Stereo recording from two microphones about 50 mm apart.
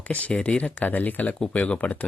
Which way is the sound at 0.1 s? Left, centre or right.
Left.